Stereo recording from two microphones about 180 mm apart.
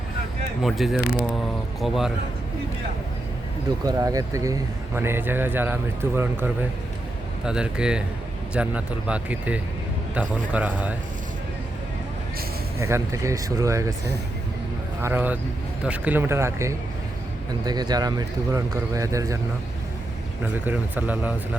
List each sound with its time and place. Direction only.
0.6 s speech: centre (ahead or behind)
3.8 s speech: 20° right (ahead or behind)
12.8 s speech: 15° right (ahead or behind)
15.0 s speech: 10° right (ahead or behind)
20.7 s speech: 10° right (ahead or behind)